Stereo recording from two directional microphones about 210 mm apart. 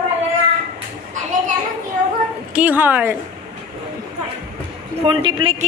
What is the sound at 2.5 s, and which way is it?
Speech, 10° right (ahead or behind).